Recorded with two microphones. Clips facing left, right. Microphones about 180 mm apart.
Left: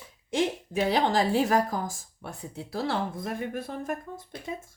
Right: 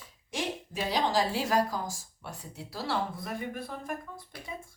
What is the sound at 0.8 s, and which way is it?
Speech, 55° left (ahead or behind).